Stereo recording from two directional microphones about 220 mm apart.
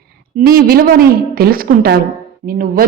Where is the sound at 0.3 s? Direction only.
45° right (ahead or behind).